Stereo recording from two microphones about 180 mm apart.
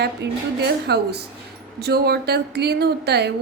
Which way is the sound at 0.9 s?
65° right (ahead or behind).